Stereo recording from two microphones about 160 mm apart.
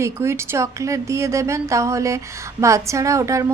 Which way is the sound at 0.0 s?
15° right (ahead or behind).